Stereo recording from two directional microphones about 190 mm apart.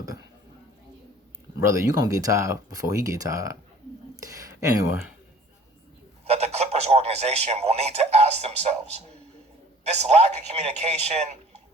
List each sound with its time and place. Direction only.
1.5 s speech: 15° right (ahead or behind)
6.2 s a man's voice: 35° right (ahead or behind)